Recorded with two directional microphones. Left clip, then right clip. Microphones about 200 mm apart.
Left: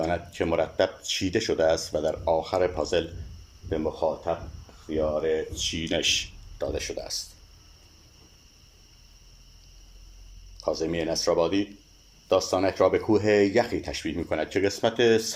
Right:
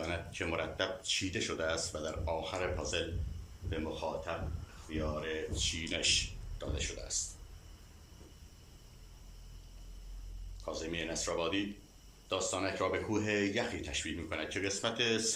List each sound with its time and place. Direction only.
0.0 s speech: 40° left (ahead or behind)
4.9 s speech: 40° left (ahead or behind)
10.6 s speech: 40° left (ahead or behind)